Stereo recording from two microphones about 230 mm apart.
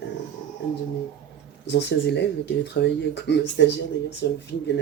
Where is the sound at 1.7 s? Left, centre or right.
Left.